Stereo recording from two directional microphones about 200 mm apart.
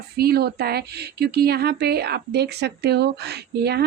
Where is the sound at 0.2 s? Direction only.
50° right (ahead or behind).